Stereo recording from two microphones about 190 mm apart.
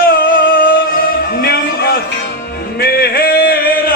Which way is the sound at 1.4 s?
55° left (ahead or behind).